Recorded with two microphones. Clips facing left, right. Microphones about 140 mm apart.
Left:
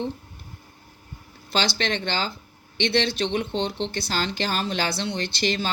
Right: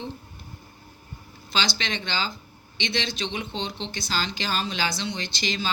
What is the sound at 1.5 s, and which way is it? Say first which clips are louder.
Speech: left 4 dB; 55° left (ahead or behind).